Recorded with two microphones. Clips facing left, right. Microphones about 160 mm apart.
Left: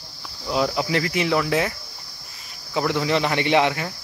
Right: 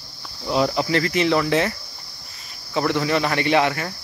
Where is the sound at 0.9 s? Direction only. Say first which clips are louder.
Right 3 dB; 15° left (ahead or behind).